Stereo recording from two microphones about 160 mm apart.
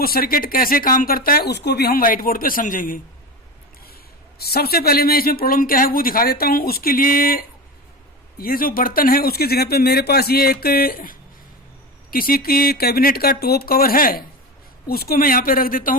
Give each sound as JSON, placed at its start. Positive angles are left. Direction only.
{"t": 0.0, "sound": "speech", "side_deg": 65}
{"t": 4.4, "sound": "speech", "side_deg": 75}